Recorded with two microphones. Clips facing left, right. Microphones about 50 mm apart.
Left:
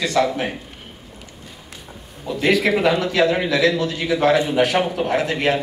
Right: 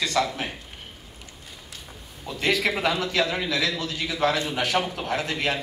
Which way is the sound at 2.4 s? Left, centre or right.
Left.